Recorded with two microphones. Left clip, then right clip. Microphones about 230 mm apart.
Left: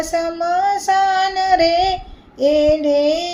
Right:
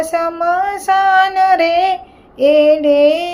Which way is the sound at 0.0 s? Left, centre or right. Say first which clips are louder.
Right 4 dB; centre.